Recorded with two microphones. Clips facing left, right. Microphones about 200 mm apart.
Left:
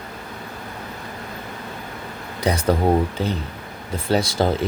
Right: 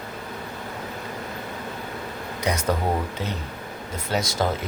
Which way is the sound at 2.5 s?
35° left (ahead or behind).